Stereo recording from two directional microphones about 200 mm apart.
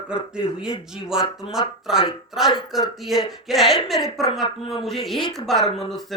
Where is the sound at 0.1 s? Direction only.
5° right (ahead or behind).